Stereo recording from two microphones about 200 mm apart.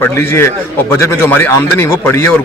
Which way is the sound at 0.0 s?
10° left (ahead or behind).